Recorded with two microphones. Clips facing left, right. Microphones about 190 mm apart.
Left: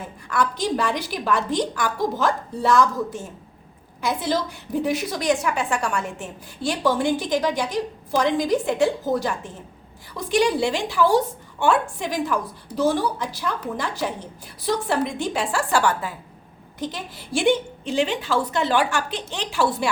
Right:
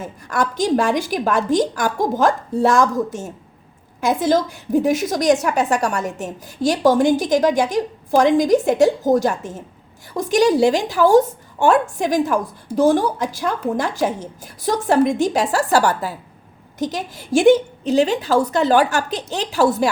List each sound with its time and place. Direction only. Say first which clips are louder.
0.0 s a woman's voice: right 2 dB; 45° right (ahead or behind)